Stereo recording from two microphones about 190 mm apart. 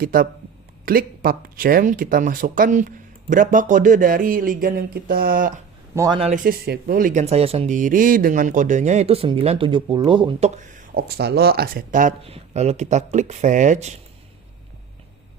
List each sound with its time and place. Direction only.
0.0 s speech: 50° right (ahead or behind)
5.9 s speech: 15° right (ahead or behind)
6.1 s speech: 30° right (ahead or behind)
6.4 s speech: 50° right (ahead or behind)
10.9 s speech: 55° right (ahead or behind); by 13.9 s 40° right (ahead or behind)